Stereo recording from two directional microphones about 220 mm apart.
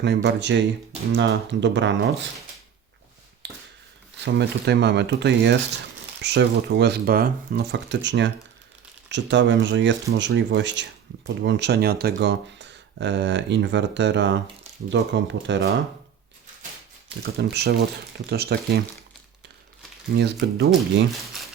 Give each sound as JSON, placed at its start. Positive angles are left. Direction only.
{"t": 0.0, "sound": "speech", "side_deg": -50}
{"t": 3.4, "sound": "a sound", "side_deg": -50}
{"t": 4.4, "sound": "speech", "side_deg": -50}
{"t": 17.3, "sound": "speech", "side_deg": -45}
{"t": 20.1, "sound": "speech", "side_deg": -60}
{"t": 20.7, "sound": "speech", "side_deg": 0}